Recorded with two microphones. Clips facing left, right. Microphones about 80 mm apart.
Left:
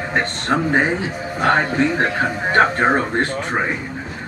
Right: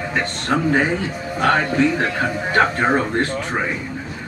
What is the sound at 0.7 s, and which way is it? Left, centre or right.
A man's voice, left.